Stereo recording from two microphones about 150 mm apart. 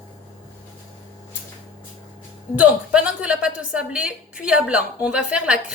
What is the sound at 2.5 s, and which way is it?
A woman's voice, 10° right (ahead or behind).